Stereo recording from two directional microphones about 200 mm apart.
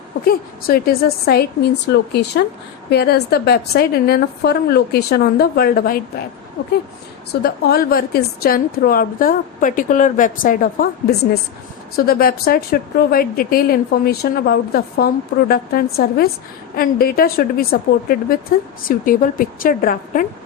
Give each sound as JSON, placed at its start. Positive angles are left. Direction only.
{"t": 0.3, "sound": "speech", "side_deg": 50}
{"t": 2.9, "sound": "speech", "side_deg": 55}
{"t": 7.4, "sound": "speech", "side_deg": 50}